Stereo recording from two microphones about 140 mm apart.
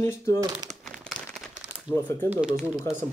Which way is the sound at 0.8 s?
5° left (ahead or behind).